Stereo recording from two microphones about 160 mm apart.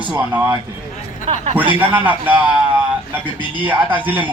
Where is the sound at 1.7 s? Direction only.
10° right (ahead or behind).